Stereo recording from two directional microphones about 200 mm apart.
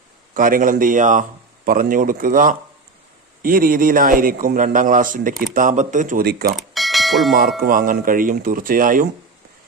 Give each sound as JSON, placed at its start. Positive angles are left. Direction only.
{"t": 0.3, "sound": "speech", "side_deg": -45}
{"t": 6.6, "sound": "bell", "side_deg": 0}
{"t": 7.6, "sound": "speech", "side_deg": -45}